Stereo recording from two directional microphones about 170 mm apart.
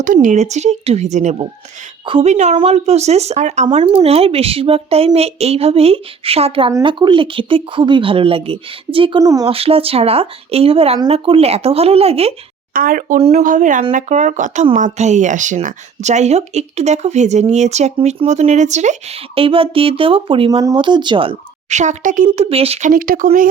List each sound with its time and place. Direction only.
0.0 s speech: 50° right (ahead or behind); by 9.5 s 20° right (ahead or behind)
9.5 s speech: 35° right (ahead or behind)
12.7 s speech: 55° right (ahead or behind)
13.1 s speech: 40° right (ahead or behind)
22.3 s speech: 35° right (ahead or behind)
22.9 s speech: 55° right (ahead or behind)